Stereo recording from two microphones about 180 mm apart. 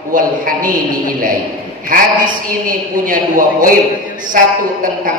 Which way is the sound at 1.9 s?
50° right (ahead or behind).